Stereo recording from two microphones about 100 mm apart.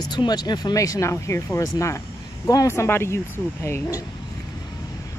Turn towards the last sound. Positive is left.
turn(degrees=25)  # may be behind; listen again after turning